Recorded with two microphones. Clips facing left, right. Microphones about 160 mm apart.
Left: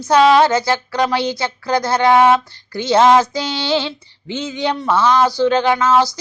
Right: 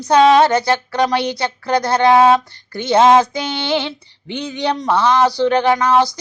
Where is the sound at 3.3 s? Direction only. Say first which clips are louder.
Left 1 dB; 55° right (ahead or behind).